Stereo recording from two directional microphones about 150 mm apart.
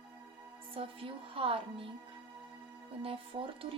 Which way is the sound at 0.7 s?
35° right (ahead or behind).